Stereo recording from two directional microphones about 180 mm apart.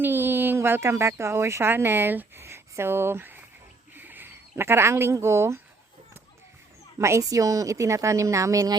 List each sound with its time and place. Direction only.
0.0 s speech: 10° right (ahead or behind)
3.9 s a sound: 10° right (ahead or behind)
7.0 s a woman's voice: 15° right (ahead or behind)